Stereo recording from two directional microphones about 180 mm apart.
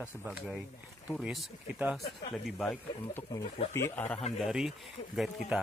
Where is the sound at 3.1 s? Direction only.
15° left (ahead or behind).